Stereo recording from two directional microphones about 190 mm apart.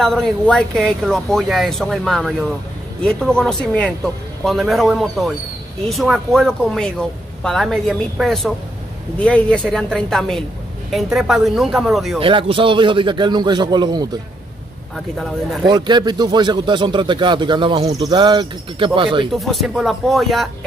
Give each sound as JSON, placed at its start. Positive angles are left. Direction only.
{"t": 0.0, "sound": "speech", "side_deg": 0}
{"t": 12.2, "sound": "speech", "side_deg": -25}
{"t": 15.6, "sound": "speech", "side_deg": -20}
{"t": 19.3, "sound": "speech", "side_deg": 0}